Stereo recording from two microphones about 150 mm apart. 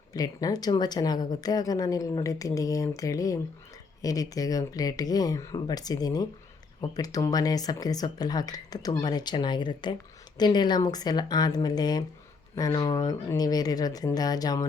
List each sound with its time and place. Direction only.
0.1 s a woman's voice: 25° left (ahead or behind)